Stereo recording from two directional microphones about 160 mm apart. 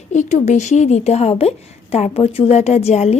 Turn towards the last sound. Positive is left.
turn(degrees=40)  # may be behind; listen again after turning